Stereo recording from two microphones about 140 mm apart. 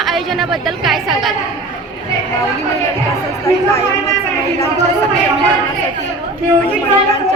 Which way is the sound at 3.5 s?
20° left (ahead or behind).